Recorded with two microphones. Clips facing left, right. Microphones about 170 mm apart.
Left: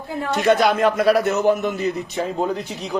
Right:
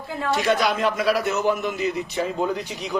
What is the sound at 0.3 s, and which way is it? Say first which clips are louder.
A man's voice: left 6 dB; 50° left (ahead or behind).